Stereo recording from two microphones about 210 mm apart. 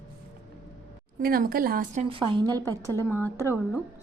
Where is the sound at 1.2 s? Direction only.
45° right (ahead or behind); by 3.0 s 15° right (ahead or behind).